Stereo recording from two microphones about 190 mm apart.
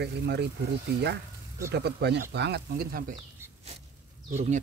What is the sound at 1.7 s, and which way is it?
Speech, 60° right (ahead or behind).